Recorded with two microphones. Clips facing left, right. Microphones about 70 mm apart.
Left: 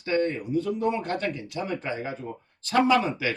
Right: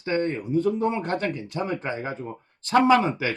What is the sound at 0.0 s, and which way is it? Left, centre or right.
Speech, right.